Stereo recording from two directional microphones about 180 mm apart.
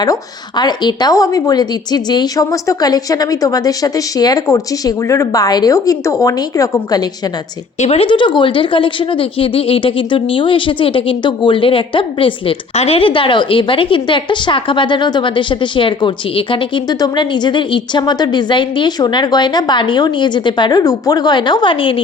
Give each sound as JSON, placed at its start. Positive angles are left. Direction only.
{"t": 0.0, "sound": "a woman's voice", "side_deg": 20}
{"t": 7.8, "sound": "a woman's voice", "side_deg": 35}